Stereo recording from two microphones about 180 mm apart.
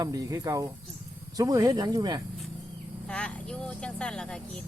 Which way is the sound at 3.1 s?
5° left (ahead or behind).